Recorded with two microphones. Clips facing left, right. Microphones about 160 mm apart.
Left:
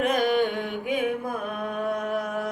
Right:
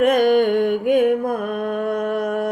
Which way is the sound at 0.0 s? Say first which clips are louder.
Right 8 dB; 60° right (ahead or behind).